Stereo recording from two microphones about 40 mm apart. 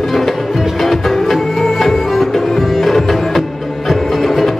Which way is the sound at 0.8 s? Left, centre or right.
Centre.